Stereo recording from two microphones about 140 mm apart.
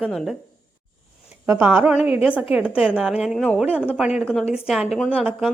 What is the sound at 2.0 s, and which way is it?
Speech, 45° left (ahead or behind).